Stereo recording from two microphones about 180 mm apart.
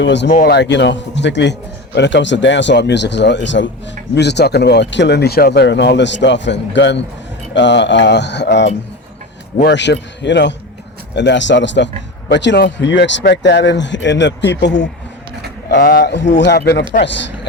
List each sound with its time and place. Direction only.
0.0 s speech: 75° left (ahead or behind)
0.3 s speech: 55° left (ahead or behind); by 3.7 s 90° left
4.1 s speech: 70° left (ahead or behind)
15.8 s speech: 55° left (ahead or behind)